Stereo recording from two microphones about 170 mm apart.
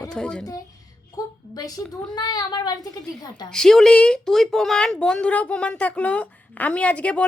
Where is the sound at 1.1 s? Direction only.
20° left (ahead or behind).